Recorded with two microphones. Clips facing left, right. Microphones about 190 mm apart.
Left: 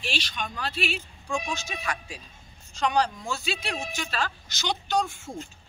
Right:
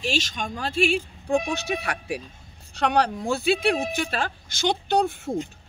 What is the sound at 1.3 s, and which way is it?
Speech, 60° right (ahead or behind).